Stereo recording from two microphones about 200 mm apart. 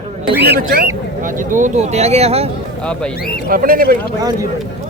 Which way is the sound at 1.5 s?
40° right (ahead or behind).